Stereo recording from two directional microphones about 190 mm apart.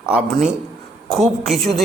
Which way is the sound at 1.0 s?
Centre (ahead or behind).